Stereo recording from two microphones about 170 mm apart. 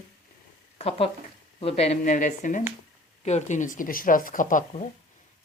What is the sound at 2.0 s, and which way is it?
Speech, 50° left (ahead or behind).